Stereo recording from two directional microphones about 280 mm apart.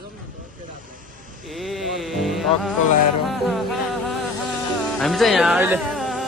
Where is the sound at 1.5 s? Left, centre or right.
Centre.